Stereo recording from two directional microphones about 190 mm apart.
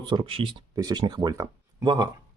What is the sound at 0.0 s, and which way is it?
Speech, 25° right (ahead or behind).